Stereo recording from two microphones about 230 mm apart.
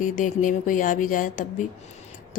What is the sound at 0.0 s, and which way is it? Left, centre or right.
Speech, left.